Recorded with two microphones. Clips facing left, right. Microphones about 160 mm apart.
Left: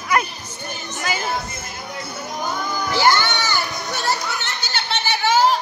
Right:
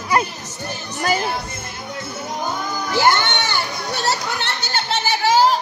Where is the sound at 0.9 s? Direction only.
40° right (ahead or behind).